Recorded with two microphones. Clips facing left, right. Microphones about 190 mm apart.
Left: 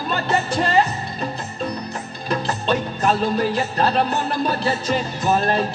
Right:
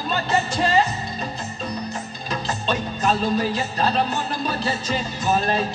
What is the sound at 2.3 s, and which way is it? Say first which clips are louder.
Music: left 4 dB; 60° left (ahead or behind).